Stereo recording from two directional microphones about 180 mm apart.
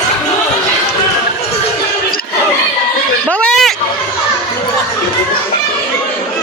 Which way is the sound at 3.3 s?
5° left (ahead or behind).